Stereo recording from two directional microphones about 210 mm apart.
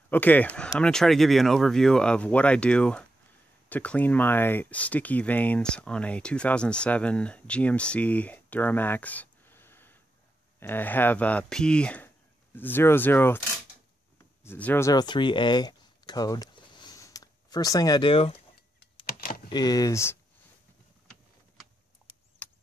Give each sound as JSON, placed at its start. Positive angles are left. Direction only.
{"t": 0.1, "sound": "speech", "side_deg": 10}
{"t": 14.4, "sound": "speech", "side_deg": 10}
{"t": 19.0, "sound": "computer keyboard", "side_deg": 45}
{"t": 19.5, "sound": "speech", "side_deg": 20}